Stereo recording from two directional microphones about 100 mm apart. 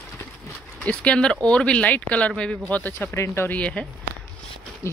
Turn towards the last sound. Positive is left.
turn(degrees=10)  # may be behind; listen again after turning